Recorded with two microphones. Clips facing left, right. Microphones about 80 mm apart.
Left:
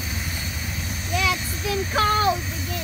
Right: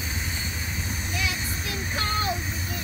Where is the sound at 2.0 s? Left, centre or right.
Left.